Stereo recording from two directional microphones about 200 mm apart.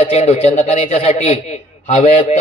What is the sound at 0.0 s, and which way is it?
A man's voice, 30° left (ahead or behind).